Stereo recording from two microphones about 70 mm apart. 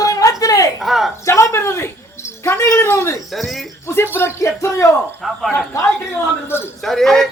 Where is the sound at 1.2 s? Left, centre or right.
Left.